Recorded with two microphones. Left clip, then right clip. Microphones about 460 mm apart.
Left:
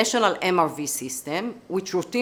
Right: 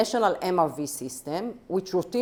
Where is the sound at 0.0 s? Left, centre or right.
Right.